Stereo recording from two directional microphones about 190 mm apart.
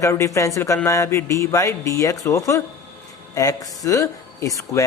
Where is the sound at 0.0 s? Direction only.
15° left (ahead or behind).